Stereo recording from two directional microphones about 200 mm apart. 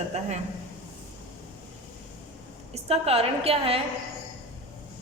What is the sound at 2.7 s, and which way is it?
A woman's voice, 30° right (ahead or behind).